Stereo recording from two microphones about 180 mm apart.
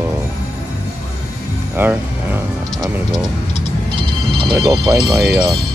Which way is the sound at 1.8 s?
10° right (ahead or behind).